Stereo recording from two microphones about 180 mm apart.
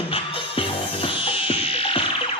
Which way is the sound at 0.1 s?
30° left (ahead or behind).